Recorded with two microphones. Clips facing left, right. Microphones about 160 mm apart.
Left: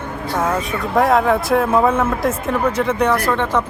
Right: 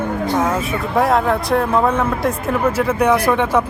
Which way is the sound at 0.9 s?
Centre (ahead or behind).